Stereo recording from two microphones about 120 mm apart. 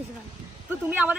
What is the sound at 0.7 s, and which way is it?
Speech, 15° right (ahead or behind).